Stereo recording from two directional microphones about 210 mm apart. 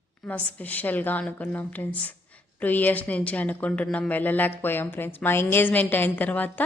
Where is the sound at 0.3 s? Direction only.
5° left (ahead or behind).